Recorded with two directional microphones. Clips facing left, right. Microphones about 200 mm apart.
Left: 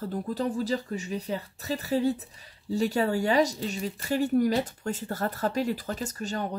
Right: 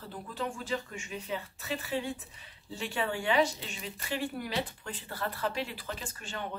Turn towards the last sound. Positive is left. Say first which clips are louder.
# left 8 dB
turn(degrees=40)  # may be behind; listen again after turning